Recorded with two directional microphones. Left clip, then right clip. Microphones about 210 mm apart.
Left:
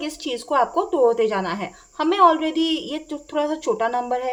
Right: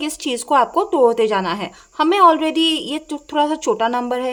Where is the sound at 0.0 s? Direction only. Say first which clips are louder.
Right 4 dB; 30° right (ahead or behind).